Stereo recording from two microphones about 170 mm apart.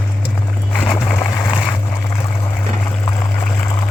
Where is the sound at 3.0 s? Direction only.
25° left (ahead or behind).